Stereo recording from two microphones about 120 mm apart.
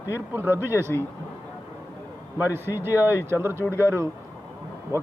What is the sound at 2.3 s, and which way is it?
Speech, 15° right (ahead or behind).